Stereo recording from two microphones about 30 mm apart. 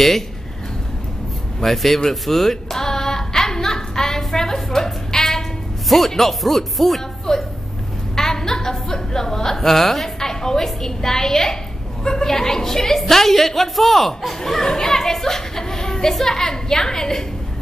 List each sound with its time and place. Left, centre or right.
1.6 s a woman's voice: centre
2.5 s a sound: centre
4.2 s music: centre
5.9 s a woman's voice: centre
7.3 s a woman's voice: centre
10.1 s a woman's voice: centre
14.4 s a child's voice: centre